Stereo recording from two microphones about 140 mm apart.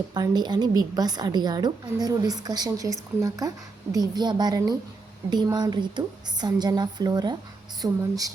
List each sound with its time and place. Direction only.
0.1 s a woman's voice: 30° right (ahead or behind)